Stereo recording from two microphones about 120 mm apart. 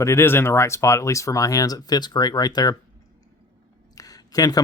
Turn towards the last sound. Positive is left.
turn(degrees=30)  # may be behind; listen again after turning